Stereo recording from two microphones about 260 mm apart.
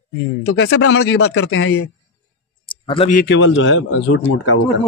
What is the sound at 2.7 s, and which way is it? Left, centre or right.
A man's voice, centre.